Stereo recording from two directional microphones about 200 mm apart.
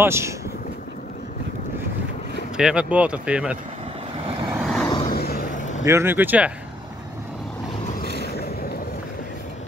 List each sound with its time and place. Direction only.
0.0 s speech: 15° right (ahead or behind)
2.5 s speech: 5° right (ahead or behind)
4.5 s vehicle: centre (ahead or behind)
5.0 s a sound: 50° left (ahead or behind)
5.9 s speech: 10° right (ahead or behind)